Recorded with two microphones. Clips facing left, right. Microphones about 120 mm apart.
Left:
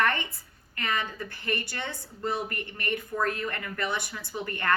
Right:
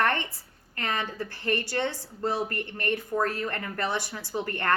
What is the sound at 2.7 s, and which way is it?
A woman's voice, 30° right (ahead or behind).